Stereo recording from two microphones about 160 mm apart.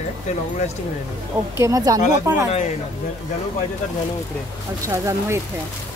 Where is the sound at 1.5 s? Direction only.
20° right (ahead or behind).